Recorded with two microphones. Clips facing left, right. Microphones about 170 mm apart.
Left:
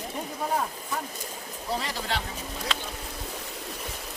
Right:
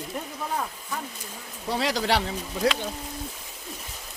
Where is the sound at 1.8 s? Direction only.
80° right.